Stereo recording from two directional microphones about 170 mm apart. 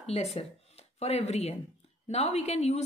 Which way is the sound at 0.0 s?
40° left (ahead or behind).